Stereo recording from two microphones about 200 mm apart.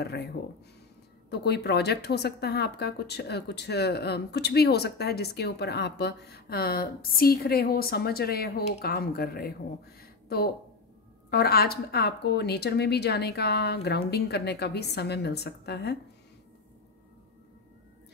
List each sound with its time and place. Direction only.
1.3 s speech: 55° left (ahead or behind)
9.9 s a sound: 50° left (ahead or behind)
11.2 s speech: 50° left (ahead or behind)